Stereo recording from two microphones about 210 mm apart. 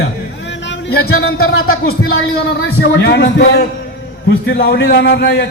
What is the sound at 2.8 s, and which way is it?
A man's voice, 55° left (ahead or behind).